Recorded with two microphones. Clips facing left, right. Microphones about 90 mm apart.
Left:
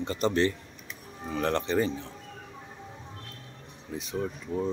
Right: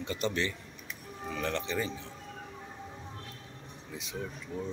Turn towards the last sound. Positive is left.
turn(degrees=40)  # may be behind; listen again after turning